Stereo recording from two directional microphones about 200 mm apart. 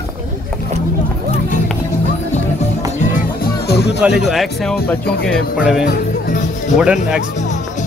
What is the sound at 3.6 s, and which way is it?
Music, 55° left (ahead or behind).